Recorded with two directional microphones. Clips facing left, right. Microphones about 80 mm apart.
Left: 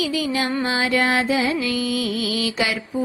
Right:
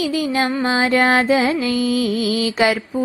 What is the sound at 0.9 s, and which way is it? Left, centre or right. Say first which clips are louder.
Music: right 5 dB; right.